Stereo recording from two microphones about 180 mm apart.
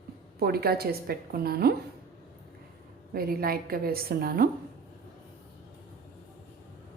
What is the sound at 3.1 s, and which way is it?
A woman's voice, 55° right (ahead or behind).